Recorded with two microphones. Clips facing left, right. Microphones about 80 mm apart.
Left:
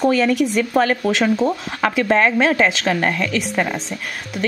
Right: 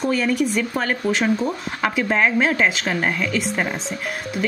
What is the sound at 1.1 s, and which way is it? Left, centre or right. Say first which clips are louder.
Speech: left 2 dB; left.